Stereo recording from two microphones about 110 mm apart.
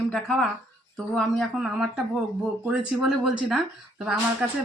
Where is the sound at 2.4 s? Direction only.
5° right (ahead or behind).